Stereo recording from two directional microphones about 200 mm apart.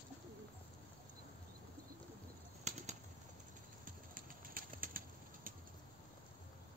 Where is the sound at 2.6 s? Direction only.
35° right (ahead or behind).